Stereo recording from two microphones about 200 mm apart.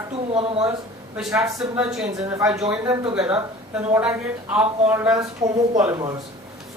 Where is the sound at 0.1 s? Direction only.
30° right (ahead or behind).